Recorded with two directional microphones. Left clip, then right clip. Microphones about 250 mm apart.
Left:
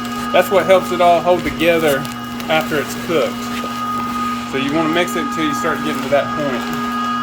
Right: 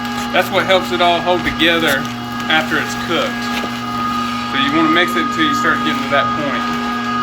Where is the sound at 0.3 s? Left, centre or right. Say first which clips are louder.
Left 2 dB; left.